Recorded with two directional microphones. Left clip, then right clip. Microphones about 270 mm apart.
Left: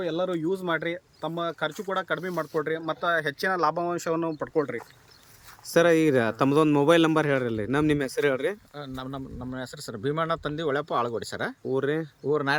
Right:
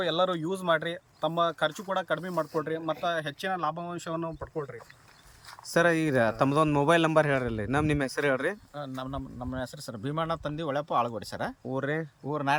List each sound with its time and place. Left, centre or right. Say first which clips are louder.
0.0 s a man's voice: right 1 dB; centre
3.5 s speech: left 5 dB; left
5.7 s a man's voice: left 4 dB; centre